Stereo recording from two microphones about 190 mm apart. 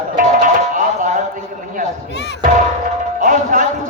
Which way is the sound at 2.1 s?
60° left (ahead or behind).